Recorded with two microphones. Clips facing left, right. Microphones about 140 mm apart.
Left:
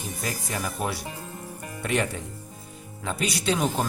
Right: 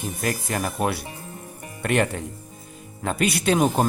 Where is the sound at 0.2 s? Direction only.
60° right (ahead or behind).